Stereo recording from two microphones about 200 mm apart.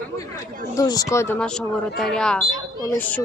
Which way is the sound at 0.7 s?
20° left (ahead or behind).